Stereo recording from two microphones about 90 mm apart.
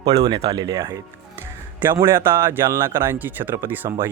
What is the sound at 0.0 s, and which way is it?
Speech, 40° right (ahead or behind).